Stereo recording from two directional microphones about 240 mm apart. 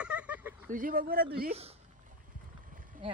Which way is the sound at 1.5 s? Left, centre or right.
Right.